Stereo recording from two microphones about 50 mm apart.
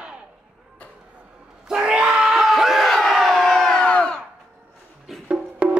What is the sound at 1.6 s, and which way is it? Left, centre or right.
Crowd, centre.